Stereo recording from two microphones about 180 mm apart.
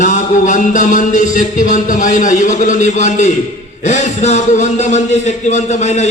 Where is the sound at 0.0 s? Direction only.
45° left (ahead or behind).